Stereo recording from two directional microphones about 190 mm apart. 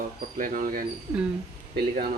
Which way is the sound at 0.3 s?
45° right (ahead or behind).